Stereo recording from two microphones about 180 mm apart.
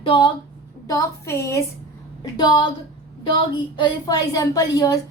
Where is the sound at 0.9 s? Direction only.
15° left (ahead or behind).